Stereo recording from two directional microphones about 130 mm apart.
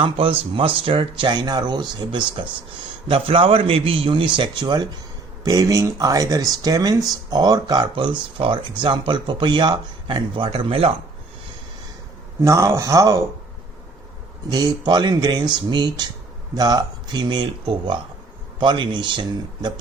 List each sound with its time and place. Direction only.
0.0 s a man's voice: 45° right (ahead or behind)
12.4 s speech: 20° right (ahead or behind)
14.5 s speech: 35° right (ahead or behind)